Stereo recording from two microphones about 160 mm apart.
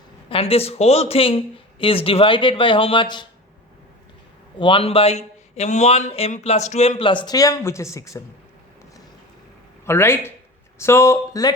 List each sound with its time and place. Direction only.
0.3 s a man's voice: 35° left (ahead or behind)
4.6 s a man's voice: 35° left (ahead or behind); by 8.2 s 20° left (ahead or behind)
9.8 s speech: 15° left (ahead or behind)